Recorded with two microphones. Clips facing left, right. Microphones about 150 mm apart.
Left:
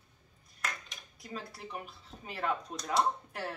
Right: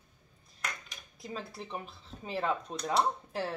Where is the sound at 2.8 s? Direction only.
30° right (ahead or behind).